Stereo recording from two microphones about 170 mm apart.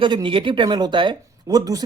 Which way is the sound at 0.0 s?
30° right (ahead or behind).